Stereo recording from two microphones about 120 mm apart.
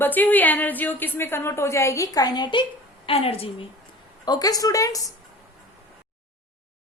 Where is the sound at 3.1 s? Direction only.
50° left (ahead or behind).